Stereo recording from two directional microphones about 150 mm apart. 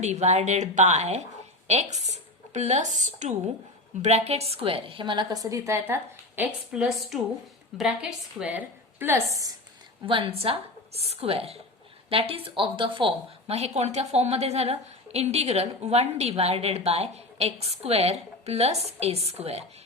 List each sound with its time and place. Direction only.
0.0 s a woman's voice: 50° right (ahead or behind); by 9.6 s 20° right (ahead or behind)
10.1 s a woman's voice: 40° right (ahead or behind)